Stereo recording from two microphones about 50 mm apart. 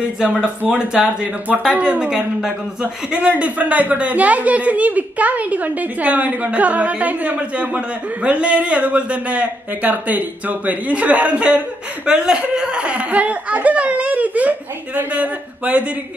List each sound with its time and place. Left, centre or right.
0.2 s a woman's voice: centre